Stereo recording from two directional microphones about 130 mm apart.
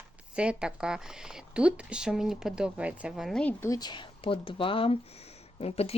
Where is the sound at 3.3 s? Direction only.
5° left (ahead or behind).